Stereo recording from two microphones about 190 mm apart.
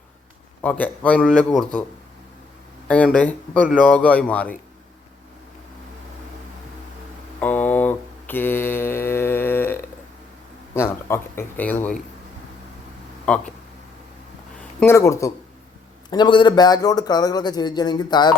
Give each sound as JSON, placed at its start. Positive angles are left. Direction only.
{"t": 0.6, "sound": "speech", "side_deg": 5}
{"t": 2.8, "sound": "speech", "side_deg": 5}
{"t": 7.3, "sound": "mantra", "side_deg": 10}
{"t": 10.8, "sound": "speech", "side_deg": 15}
{"t": 13.2, "sound": "speech", "side_deg": 5}
{"t": 14.8, "sound": "a man's voice", "side_deg": 15}